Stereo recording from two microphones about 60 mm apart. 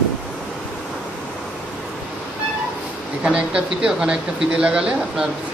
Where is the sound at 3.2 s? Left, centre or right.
Centre.